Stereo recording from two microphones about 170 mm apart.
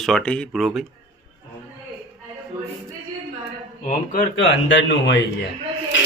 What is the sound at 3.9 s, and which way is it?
Speech, 60° left (ahead or behind).